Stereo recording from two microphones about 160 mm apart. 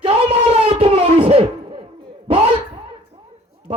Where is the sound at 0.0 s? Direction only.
35° right (ahead or behind).